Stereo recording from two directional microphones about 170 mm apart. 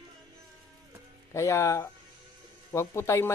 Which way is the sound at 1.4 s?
15° left (ahead or behind).